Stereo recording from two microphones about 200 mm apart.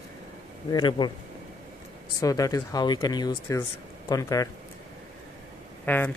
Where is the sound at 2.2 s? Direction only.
15° left (ahead or behind).